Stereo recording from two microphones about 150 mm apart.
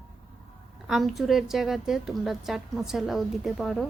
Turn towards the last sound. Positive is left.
turn(degrees=0)  # may be behind; listen again after turning